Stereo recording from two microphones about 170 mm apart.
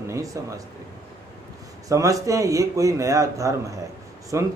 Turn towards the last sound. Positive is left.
turn(degrees=-15)  # may be behind; listen again after turning